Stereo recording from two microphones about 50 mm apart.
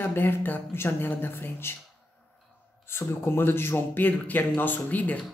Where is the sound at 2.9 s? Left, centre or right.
Left.